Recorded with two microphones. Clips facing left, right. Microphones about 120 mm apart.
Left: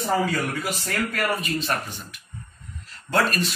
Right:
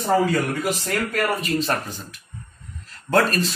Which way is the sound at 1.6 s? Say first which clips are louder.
Right 3 dB; 35° right (ahead or behind).